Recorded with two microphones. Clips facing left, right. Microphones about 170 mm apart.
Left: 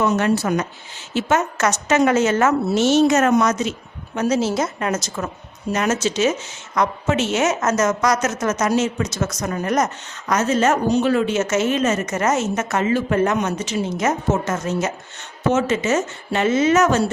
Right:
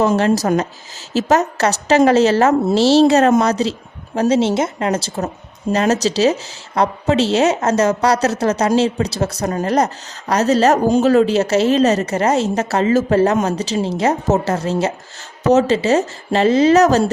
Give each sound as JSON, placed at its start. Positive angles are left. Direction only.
{"t": 0.2, "sound": "a woman's voice", "side_deg": -35}